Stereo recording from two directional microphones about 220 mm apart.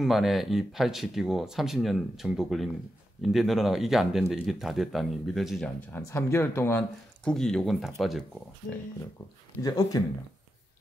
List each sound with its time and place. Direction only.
0.0 s speech: centre (ahead or behind)
9.6 s speech: 15° left (ahead or behind)